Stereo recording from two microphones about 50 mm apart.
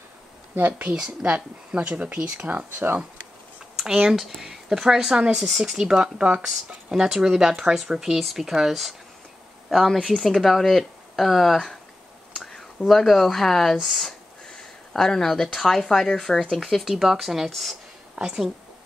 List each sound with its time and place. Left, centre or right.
0.8 s speech: centre; by 2.5 s right
2.5 s speech: right
3.7 s speech: centre
12.4 s a sound: centre
12.8 s speech: centre
18.1 s speech: centre